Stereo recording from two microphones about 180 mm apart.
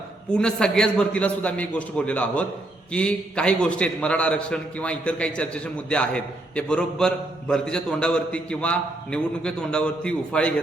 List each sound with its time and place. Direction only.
0.3 s a man's voice: 5° left (ahead or behind)